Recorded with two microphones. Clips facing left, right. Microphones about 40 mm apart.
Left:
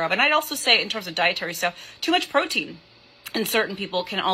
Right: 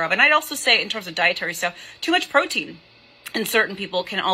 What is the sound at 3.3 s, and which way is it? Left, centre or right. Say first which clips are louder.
Speech: right 3 dB; right.